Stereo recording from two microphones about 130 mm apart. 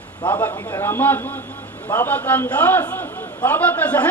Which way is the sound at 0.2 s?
35° left (ahead or behind).